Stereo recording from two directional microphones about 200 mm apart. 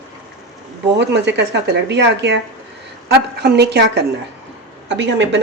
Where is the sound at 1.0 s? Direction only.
60° right (ahead or behind).